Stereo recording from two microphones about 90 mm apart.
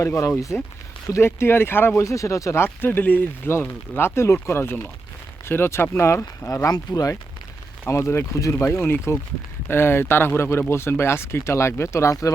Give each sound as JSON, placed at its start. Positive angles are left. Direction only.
{"t": 0.0, "sound": "speech", "side_deg": 30}
{"t": 2.6, "sound": "speech", "side_deg": 25}
{"t": 6.7, "sound": "speech", "side_deg": 45}
{"t": 7.9, "sound": "speech", "side_deg": 30}